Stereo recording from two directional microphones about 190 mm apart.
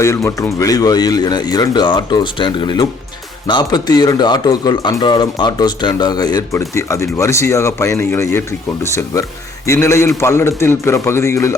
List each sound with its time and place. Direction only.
0.3 s speech: 15° left (ahead or behind)